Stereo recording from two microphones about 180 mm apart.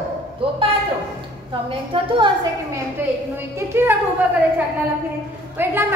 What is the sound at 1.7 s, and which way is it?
Speech, 30° right (ahead or behind).